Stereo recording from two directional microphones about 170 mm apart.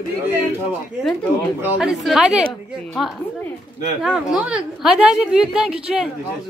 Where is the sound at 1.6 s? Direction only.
5° right (ahead or behind).